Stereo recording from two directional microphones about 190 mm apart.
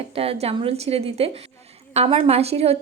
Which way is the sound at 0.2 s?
30° right (ahead or behind).